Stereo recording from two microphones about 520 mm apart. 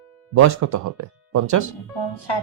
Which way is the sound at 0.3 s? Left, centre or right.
Right.